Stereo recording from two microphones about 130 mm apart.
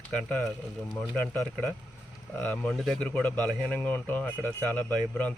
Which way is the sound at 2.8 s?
5° left (ahead or behind).